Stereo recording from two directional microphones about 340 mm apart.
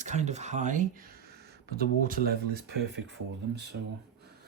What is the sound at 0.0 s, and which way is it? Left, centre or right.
Speech, centre.